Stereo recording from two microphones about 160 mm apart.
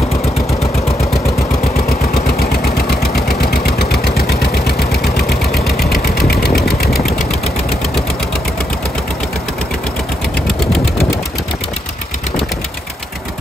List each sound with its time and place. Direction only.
2.6 s engine: 80° left
6.5 s engine: centre (ahead or behind)
6.8 s engine: 75° left (ahead or behind)